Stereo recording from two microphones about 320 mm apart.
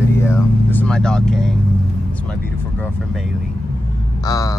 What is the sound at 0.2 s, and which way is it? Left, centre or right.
Vehicle, centre.